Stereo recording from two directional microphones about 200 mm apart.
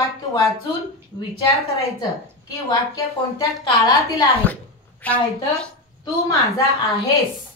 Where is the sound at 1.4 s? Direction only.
20° left (ahead or behind).